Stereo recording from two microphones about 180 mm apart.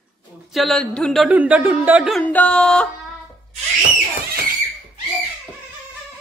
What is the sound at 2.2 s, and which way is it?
Speech, 10° left (ahead or behind).